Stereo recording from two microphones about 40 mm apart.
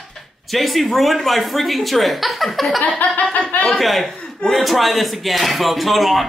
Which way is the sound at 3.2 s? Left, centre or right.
Left.